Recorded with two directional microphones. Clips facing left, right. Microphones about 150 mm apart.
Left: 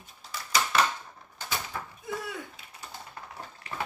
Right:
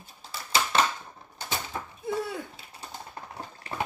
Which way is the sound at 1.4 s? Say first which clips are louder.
Right 1 dB; 30° right (ahead or behind).